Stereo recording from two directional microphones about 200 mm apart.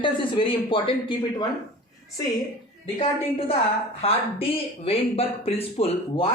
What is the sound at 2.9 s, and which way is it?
Speech, 30° left (ahead or behind).